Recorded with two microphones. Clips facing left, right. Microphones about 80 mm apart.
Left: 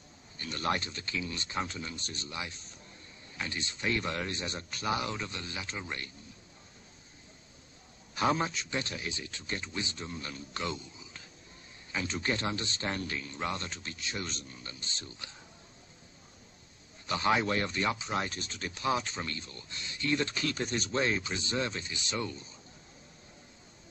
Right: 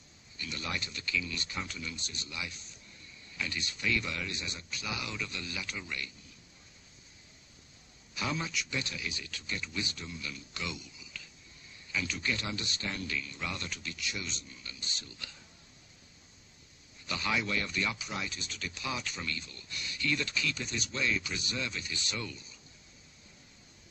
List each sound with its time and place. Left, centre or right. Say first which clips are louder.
0.4 s speech: left 6 dB; left
8.1 s speech: left 7 dB; left
17.0 s speech: left 5 dB; left
18.1 s speech: left 5 dB; left